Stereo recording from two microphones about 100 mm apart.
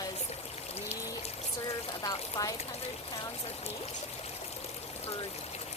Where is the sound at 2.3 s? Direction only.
40° left (ahead or behind).